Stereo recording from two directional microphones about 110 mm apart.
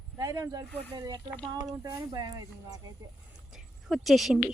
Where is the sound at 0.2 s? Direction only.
30° right (ahead or behind).